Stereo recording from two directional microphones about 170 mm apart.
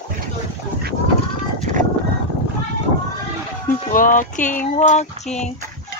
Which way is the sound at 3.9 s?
50° left (ahead or behind).